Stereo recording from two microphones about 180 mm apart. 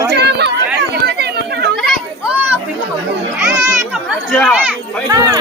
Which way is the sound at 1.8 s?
Centre (ahead or behind).